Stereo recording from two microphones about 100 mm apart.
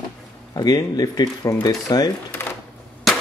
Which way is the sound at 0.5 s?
40° left (ahead or behind).